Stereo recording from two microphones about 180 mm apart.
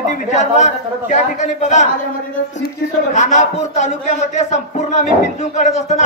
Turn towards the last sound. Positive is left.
turn(degrees=40)  # may be behind; listen again after turning